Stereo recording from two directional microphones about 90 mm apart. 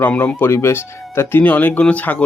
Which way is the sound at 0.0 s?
20° left (ahead or behind).